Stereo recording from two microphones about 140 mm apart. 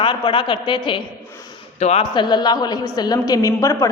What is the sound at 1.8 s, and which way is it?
Speech, 50° left (ahead or behind).